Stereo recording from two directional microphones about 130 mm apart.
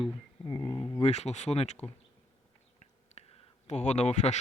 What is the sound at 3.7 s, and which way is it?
Speech, 60° left (ahead or behind).